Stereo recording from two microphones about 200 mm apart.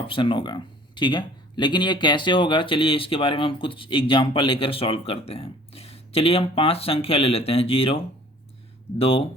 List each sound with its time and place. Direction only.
0.1 s speech: 25° left (ahead or behind)